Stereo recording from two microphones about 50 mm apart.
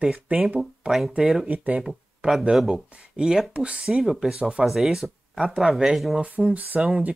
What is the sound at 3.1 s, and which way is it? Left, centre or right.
Speech, centre.